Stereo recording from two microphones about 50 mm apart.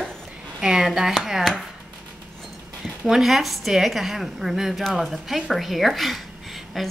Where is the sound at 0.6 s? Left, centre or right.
Centre.